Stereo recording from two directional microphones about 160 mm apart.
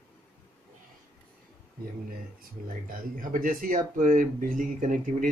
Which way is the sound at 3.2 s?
60° right (ahead or behind).